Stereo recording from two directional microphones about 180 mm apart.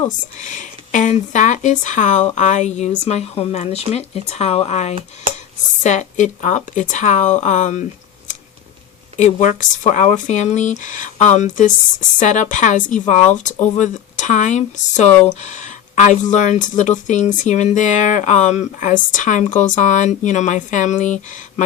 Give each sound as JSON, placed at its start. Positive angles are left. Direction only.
{"t": 0.3, "sound": "speech", "side_deg": 45}
{"t": 9.1, "sound": "speech", "side_deg": 40}